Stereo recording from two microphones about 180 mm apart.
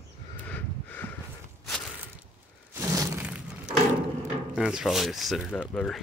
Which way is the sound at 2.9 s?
15° right (ahead or behind).